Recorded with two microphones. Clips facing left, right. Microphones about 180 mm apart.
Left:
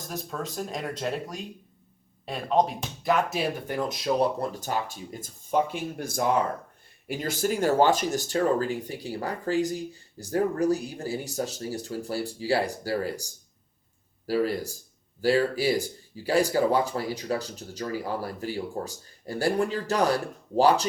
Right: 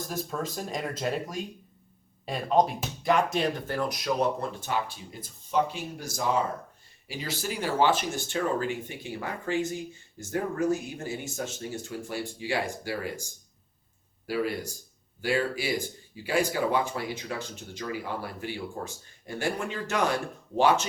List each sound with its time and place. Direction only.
0.0 s speech: centre (ahead or behind)
3.8 s speech: 25° left (ahead or behind)